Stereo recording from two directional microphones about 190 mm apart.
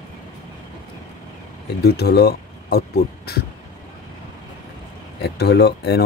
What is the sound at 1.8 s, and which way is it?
Speech, 55° left (ahead or behind).